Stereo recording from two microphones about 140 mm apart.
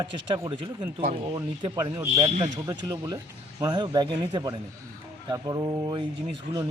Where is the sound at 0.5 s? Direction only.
35° right (ahead or behind).